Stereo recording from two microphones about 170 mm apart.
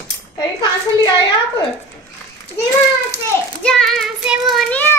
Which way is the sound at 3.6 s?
5° left (ahead or behind).